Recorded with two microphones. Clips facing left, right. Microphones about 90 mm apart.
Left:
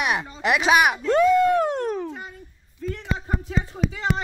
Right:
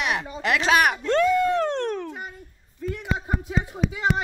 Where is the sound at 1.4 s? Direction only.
15° left (ahead or behind).